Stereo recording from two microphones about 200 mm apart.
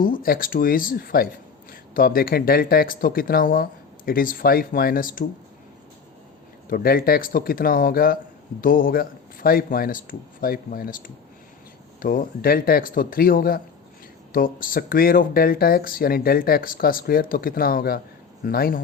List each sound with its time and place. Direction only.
0.0 s speech: 45° left (ahead or behind)
6.7 s speech: 45° left (ahead or behind)